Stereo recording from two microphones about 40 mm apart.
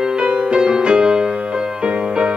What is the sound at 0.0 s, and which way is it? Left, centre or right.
Music, right.